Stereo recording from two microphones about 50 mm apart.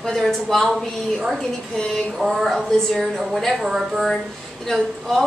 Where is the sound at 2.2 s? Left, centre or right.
Centre.